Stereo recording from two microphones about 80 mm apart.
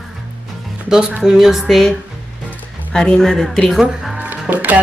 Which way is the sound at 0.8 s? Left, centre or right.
Centre.